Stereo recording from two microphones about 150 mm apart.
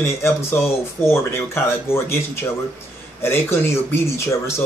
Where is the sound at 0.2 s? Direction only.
15° left (ahead or behind).